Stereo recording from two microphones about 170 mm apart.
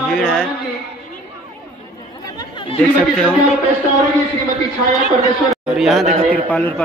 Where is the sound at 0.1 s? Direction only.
Centre (ahead or behind).